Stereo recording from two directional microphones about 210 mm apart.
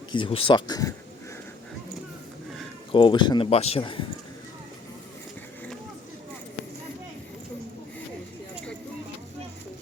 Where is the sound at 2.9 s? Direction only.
20° left (ahead or behind).